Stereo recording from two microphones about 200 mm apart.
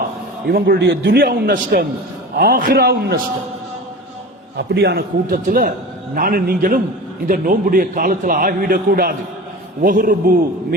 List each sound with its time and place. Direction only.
0.4 s a man's voice: 50° right (ahead or behind)
4.5 s a man's voice: 60° right (ahead or behind)